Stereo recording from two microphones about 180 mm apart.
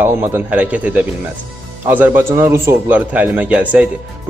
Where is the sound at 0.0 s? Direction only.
10° right (ahead or behind).